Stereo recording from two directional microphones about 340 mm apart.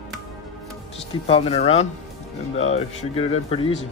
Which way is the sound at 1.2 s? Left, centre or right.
Centre.